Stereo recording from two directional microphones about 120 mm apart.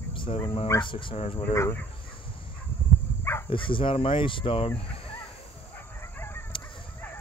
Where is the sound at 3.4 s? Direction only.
45° left (ahead or behind).